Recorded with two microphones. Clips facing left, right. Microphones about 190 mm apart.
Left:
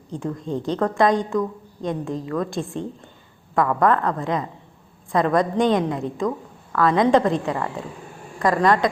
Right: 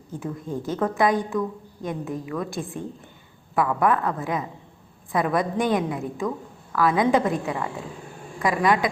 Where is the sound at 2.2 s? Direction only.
10° right (ahead or behind).